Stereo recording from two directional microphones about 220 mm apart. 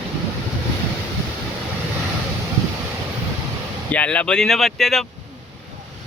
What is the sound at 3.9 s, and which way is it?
Speech, 5° left (ahead or behind).